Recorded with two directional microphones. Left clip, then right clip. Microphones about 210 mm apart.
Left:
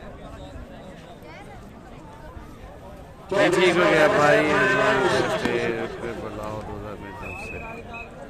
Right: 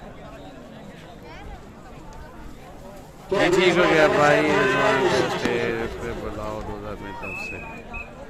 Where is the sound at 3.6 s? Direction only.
10° right (ahead or behind).